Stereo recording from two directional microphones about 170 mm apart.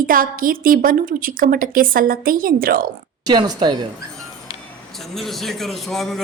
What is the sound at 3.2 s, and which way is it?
Speech, 25° right (ahead or behind).